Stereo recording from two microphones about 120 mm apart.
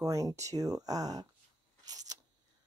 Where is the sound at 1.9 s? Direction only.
30° right (ahead or behind).